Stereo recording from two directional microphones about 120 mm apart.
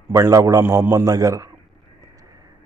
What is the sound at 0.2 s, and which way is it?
Speech, 30° right (ahead or behind).